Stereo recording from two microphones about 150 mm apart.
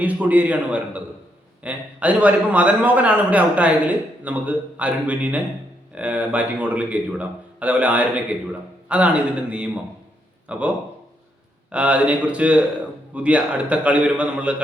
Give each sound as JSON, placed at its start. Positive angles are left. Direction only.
{"t": 0.0, "sound": "a man's voice", "side_deg": -10}
{"t": 11.7, "sound": "a man's voice", "side_deg": -10}